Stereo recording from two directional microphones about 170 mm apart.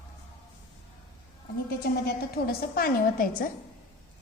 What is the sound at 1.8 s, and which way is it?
A woman's voice, 70° left (ahead or behind).